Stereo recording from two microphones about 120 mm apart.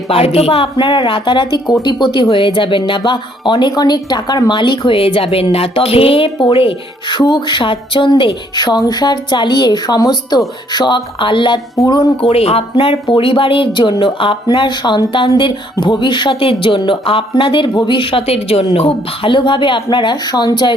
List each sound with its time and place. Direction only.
0.1 s speech: 55° left (ahead or behind)
12.3 s speech: 55° left (ahead or behind); by 20.7 s 40° left (ahead or behind)